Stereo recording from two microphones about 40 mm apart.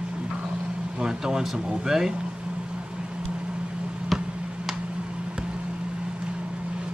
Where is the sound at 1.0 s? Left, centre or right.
Centre.